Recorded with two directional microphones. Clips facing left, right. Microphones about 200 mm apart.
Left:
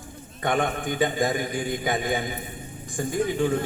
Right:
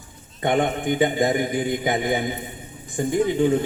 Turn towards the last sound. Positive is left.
turn(degrees=-20)  # may be behind; listen again after turning